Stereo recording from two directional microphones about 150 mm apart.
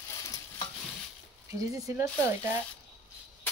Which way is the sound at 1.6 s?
20° right (ahead or behind).